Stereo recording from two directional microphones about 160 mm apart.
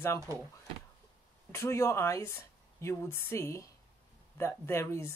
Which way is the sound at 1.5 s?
15° left (ahead or behind).